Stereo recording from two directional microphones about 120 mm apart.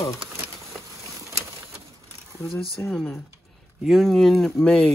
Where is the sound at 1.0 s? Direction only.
25° right (ahead or behind).